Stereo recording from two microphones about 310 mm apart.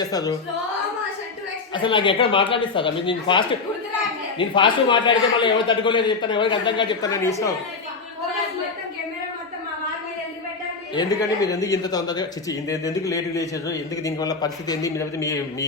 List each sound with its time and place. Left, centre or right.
0.0 s a man's voice: centre
1.7 s a man's voice: centre
10.9 s a man's voice: centre